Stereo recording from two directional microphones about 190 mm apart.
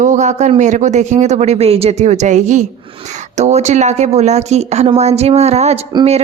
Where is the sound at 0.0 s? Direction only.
40° right (ahead or behind).